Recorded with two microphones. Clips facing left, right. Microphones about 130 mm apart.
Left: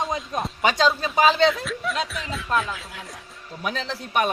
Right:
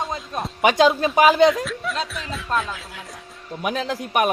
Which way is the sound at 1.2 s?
5° right (ahead or behind).